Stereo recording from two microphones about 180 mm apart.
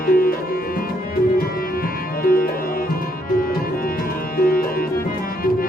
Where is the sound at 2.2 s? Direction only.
55° left (ahead or behind).